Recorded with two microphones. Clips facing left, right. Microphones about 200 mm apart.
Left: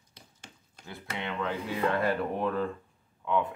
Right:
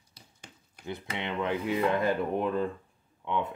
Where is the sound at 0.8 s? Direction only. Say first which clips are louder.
Right 2 dB; 20° right (ahead or behind).